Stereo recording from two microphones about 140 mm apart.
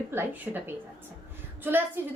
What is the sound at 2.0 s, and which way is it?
Speech, 15° right (ahead or behind).